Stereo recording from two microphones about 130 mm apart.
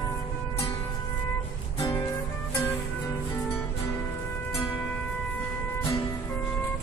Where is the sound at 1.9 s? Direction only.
25° left (ahead or behind).